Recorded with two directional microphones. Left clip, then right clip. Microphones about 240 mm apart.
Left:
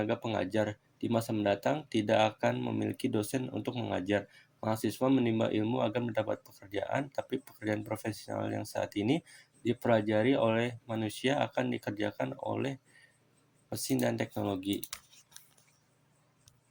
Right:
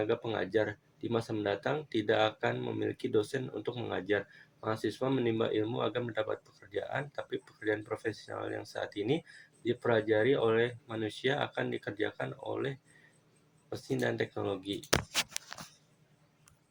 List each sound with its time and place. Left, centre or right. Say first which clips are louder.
0.0 s speech: even; left